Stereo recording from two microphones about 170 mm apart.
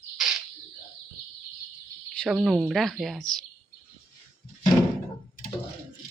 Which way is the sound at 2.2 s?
Centre (ahead or behind).